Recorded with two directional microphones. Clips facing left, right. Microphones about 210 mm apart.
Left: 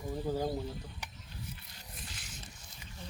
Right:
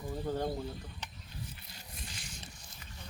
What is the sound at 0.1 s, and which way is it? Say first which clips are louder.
Speech: left 1 dB; 5° left (ahead or behind).